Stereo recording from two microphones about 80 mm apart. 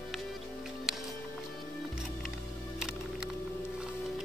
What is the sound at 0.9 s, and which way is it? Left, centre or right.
Music, centre.